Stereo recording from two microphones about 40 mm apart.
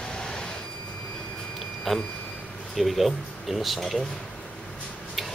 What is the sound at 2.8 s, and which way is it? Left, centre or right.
Speech, centre.